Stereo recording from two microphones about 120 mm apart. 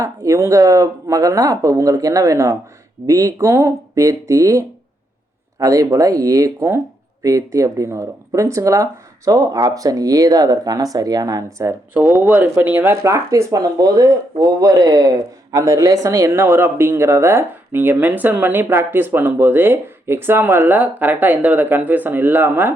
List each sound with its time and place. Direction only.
0.0 s speech: 25° right (ahead or behind)
11.9 s speech: 15° right (ahead or behind)